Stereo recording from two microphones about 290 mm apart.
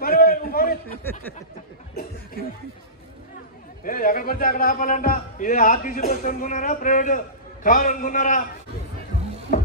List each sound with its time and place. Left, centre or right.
0.0 s a sound: left
3.8 s a man's voice: left
9.5 s music: left